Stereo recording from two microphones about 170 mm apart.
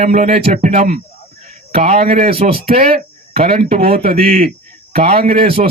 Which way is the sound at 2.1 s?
55° right (ahead or behind).